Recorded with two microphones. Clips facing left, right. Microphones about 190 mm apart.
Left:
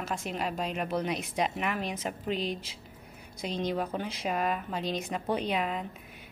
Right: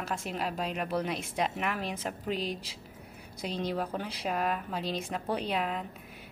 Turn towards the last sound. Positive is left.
turn(degrees=0)  # may be behind; listen again after turning